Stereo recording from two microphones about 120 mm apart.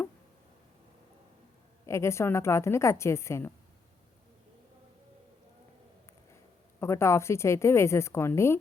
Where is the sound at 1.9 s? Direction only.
25° left (ahead or behind).